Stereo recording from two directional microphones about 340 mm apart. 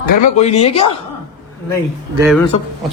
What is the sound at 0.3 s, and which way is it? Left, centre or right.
Speech, centre.